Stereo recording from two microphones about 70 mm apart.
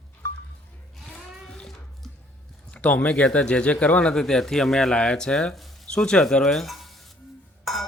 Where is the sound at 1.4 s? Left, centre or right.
Centre.